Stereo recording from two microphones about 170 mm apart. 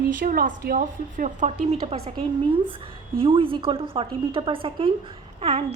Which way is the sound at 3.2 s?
30° right (ahead or behind).